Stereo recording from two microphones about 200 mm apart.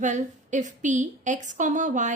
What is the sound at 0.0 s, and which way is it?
A woman's voice, 35° right (ahead or behind).